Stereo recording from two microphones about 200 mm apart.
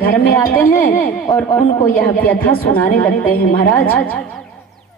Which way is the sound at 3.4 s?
45° left (ahead or behind).